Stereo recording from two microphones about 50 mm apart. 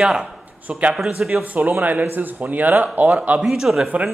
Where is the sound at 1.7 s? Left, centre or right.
Right.